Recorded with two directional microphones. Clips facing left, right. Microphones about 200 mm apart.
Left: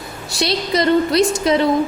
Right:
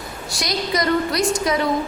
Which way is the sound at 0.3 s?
25° left (ahead or behind).